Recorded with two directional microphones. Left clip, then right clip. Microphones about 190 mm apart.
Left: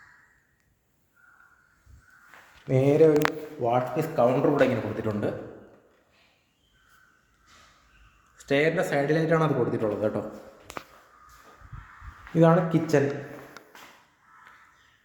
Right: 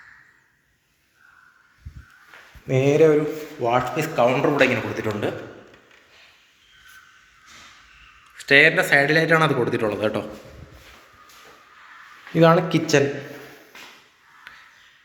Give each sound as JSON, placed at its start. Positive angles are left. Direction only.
{"t": 2.6, "sound": "speech", "side_deg": 5}
{"t": 3.6, "sound": "a man's voice", "side_deg": 15}
{"t": 8.4, "sound": "a man's voice", "side_deg": 10}
{"t": 12.3, "sound": "speech", "side_deg": 0}